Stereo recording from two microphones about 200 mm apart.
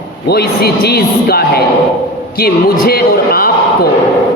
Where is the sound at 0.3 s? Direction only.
55° left (ahead or behind).